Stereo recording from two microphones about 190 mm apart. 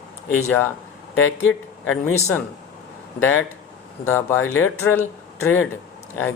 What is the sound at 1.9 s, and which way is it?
Speech, 10° left (ahead or behind).